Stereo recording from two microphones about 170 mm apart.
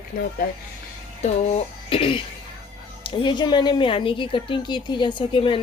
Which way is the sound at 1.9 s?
30° left (ahead or behind).